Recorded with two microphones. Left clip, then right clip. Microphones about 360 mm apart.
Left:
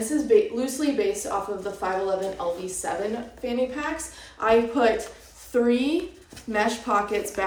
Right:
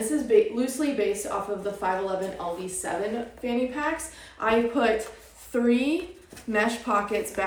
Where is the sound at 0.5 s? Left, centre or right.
Centre.